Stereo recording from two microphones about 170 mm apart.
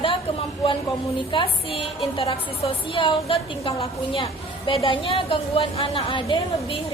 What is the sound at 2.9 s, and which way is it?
A woman's voice, 30° left (ahead or behind).